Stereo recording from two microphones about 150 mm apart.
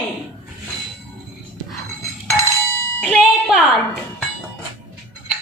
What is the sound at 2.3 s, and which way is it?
Dishes, 15° left (ahead or behind).